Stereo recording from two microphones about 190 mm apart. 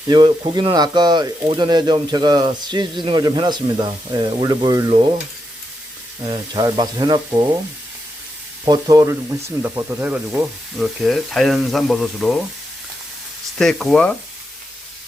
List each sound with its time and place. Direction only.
0.1 s speech: 25° right (ahead or behind)
6.2 s speech: 25° right (ahead or behind)
8.6 s speech: 20° right (ahead or behind); by 12.4 s centre (ahead or behind)
13.6 s speech: centre (ahead or behind)